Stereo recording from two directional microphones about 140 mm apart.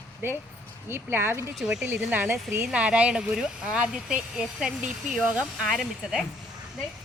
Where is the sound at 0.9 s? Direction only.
15° right (ahead or behind).